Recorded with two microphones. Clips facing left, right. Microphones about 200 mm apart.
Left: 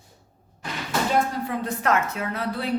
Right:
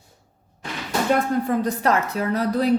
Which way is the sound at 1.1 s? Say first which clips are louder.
Right 6 dB; 45° right (ahead or behind).